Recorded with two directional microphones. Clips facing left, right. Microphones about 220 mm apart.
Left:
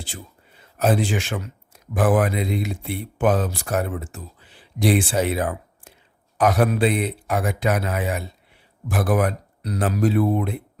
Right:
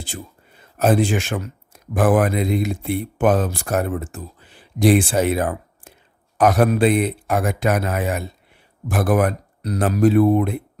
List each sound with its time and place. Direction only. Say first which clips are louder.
0.8 s speech: right 3 dB; 50° right (ahead or behind)